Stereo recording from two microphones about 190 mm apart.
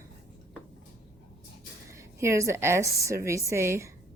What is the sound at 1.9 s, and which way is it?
A woman's voice, 15° right (ahead or behind).